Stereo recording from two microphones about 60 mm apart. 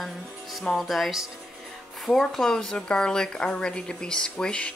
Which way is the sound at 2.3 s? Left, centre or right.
Centre.